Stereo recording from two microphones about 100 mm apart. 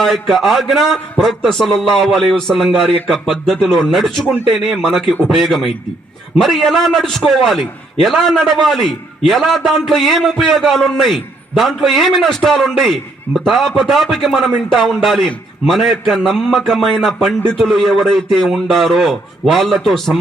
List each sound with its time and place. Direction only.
0.0 s a man's voice: centre (ahead or behind)